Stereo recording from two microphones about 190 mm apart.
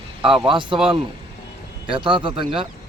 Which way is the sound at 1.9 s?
25° right (ahead or behind).